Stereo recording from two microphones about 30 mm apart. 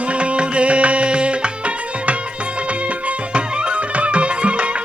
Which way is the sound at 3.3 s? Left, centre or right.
Right.